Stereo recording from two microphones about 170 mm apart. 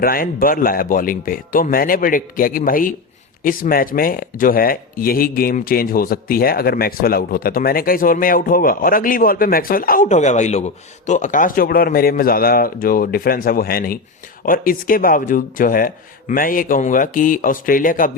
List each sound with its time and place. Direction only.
0.0 s speech: 60° left (ahead or behind)